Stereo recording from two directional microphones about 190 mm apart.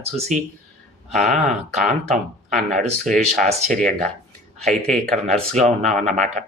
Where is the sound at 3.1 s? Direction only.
40° right (ahead or behind).